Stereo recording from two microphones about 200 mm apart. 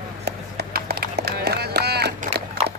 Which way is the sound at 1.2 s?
55° right (ahead or behind).